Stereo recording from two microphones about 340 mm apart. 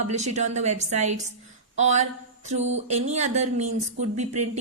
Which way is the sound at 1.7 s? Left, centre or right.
Right.